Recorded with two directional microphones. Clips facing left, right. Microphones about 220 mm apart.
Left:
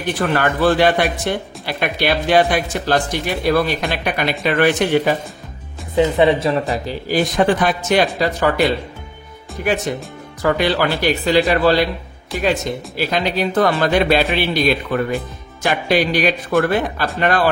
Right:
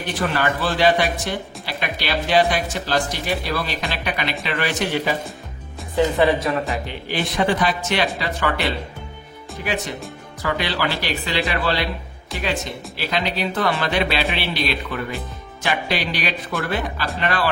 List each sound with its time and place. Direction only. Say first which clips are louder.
0.2 s speech: left 6 dB; 50° left (ahead or behind)
5.9 s a woman's voice: left 4 dB; 20° left (ahead or behind)
6.9 s speech: left 7 dB; 40° left (ahead or behind)
9.6 s speech: left 6 dB; 50° left (ahead or behind)